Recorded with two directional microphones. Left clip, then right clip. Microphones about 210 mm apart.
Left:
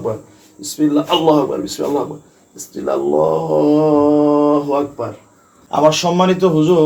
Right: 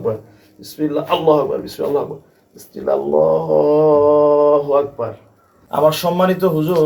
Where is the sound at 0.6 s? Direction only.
25° left (ahead or behind).